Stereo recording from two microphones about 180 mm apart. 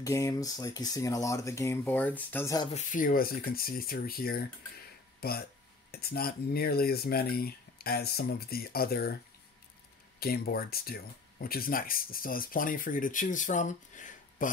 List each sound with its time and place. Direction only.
0.0 s speech: 20° left (ahead or behind)
2.7 s speech: 45° left (ahead or behind)
10.2 s speech: 60° left (ahead or behind)